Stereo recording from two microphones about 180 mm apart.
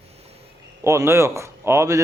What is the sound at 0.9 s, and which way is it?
Speech, 15° right (ahead or behind).